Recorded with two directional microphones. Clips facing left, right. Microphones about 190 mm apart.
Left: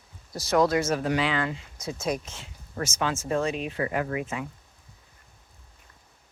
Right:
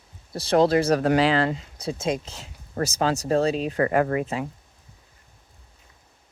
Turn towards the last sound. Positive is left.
turn(degrees=-35)  # may be behind; listen again after turning